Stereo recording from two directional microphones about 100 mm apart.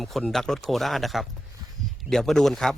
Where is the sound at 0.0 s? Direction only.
Centre (ahead or behind).